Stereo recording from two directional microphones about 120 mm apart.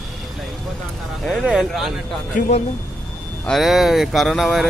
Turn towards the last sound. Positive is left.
turn(degrees=0)  # may be behind; listen again after turning